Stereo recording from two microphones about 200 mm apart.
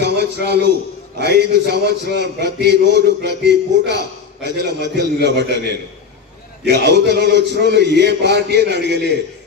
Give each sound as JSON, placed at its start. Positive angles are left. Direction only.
{"t": 0.0, "sound": "a man's voice", "side_deg": -55}
{"t": 6.7, "sound": "a man's voice", "side_deg": -55}